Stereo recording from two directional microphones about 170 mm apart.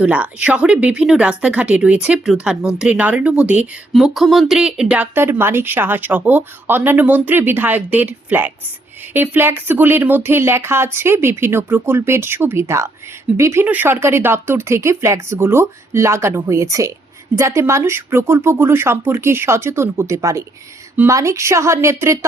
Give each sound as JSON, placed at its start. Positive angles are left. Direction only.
{"t": 0.0, "sound": "speech", "side_deg": -10}